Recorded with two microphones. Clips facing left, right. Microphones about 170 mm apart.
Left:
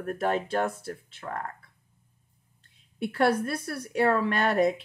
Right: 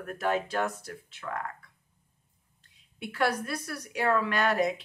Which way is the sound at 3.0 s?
30° left (ahead or behind).